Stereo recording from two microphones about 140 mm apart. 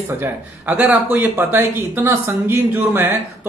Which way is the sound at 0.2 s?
10° right (ahead or behind).